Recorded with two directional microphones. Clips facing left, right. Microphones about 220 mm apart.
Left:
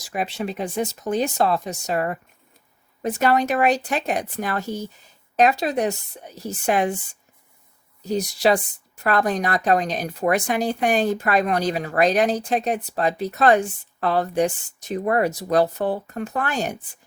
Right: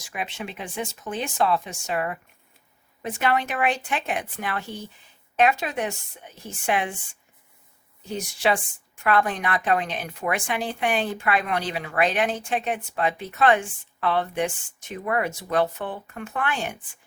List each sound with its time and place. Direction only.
0.0 s speech: 40° left (ahead or behind)